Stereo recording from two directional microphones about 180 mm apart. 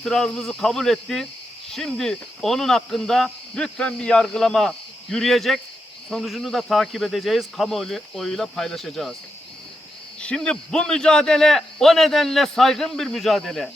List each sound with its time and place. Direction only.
0.0 s speech: 5° left (ahead or behind)
10.2 s speech: 5° left (ahead or behind)